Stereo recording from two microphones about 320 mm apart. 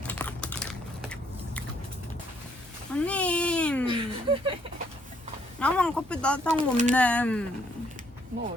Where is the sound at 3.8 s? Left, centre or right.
Centre.